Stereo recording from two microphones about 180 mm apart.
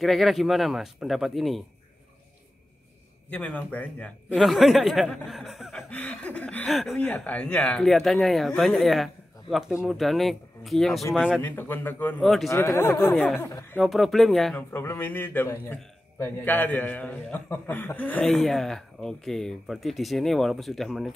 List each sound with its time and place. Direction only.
0.0 s speech: centre (ahead or behind)
3.3 s a man's voice: 5° left (ahead or behind)
11.4 s a man's voice: 10° left (ahead or behind)
12.4 s a man's voice: 15° left (ahead or behind)
13.1 s speech: centre (ahead or behind)
13.4 s a man's voice: 15° left (ahead or behind)
13.7 s speech: centre (ahead or behind)
14.7 s a man's voice: 15° left (ahead or behind)